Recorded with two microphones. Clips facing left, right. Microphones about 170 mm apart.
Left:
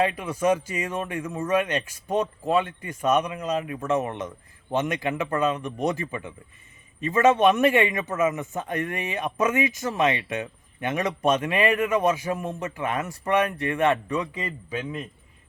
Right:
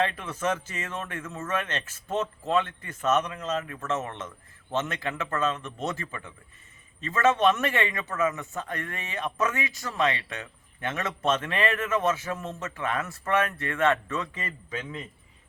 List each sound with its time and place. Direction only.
0.0 s a man's voice: 10° left (ahead or behind)